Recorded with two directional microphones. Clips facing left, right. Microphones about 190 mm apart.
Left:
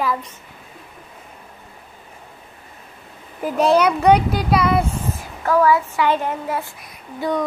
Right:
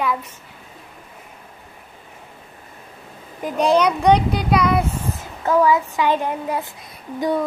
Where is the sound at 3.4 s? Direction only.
5° left (ahead or behind).